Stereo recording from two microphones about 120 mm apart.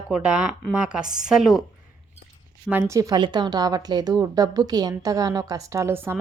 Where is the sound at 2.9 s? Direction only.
30° right (ahead or behind).